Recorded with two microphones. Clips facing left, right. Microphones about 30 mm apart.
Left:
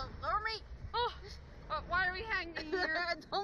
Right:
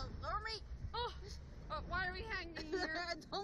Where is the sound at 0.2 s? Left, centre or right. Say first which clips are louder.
Left 8 dB; left.